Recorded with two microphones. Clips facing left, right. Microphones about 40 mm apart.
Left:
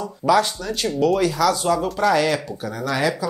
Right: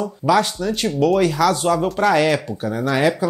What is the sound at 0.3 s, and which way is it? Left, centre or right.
Speech, right.